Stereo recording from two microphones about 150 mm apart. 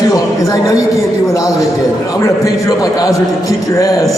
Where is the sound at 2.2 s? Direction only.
25° left (ahead or behind).